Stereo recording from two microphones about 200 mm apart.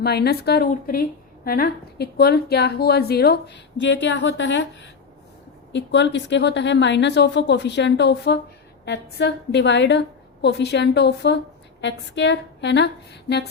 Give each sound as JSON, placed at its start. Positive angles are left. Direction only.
{"t": 0.0, "sound": "a woman's voice", "side_deg": 50}